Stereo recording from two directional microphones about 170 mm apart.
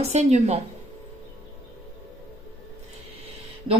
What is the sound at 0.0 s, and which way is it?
Speech, 40° right (ahead or behind).